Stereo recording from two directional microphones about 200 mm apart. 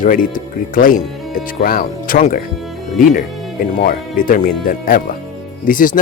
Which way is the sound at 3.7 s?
45° left (ahead or behind).